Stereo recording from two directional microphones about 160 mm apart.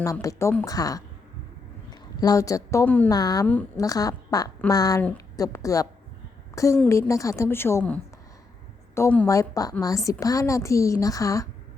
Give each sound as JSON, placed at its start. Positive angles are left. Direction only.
{"t": 0.0, "sound": "a woman's voice", "side_deg": 20}
{"t": 3.1, "sound": "a woman's voice", "side_deg": 25}
{"t": 3.4, "sound": "a woman's voice", "side_deg": 10}
{"t": 3.8, "sound": "a woman's voice", "side_deg": 20}
{"t": 6.5, "sound": "a sound", "side_deg": 20}
{"t": 6.8, "sound": "a woman's voice", "side_deg": 20}